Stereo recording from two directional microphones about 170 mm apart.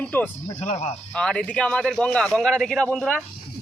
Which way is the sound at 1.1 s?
5° left (ahead or behind).